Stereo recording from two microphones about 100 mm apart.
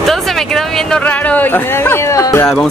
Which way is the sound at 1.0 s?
15° left (ahead or behind).